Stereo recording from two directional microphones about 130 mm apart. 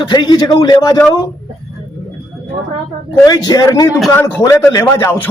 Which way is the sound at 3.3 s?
30° left (ahead or behind).